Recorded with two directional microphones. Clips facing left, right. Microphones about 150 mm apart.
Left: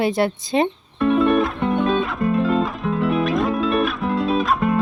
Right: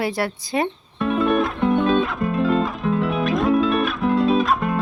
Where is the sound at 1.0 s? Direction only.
Centre (ahead or behind).